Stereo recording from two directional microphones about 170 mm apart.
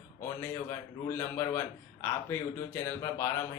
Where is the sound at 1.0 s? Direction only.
15° left (ahead or behind).